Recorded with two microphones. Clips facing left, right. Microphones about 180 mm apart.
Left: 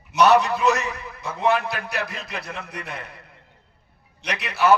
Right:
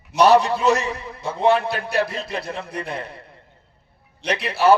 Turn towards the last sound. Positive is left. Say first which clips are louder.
# right 4 dB
turn(degrees=-30)  # may be behind; listen again after turning